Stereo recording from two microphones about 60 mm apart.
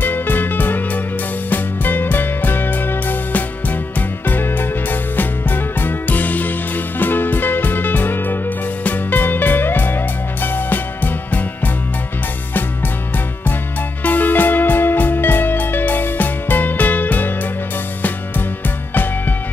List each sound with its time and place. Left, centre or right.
0.0 s music: left
14.0 s music: left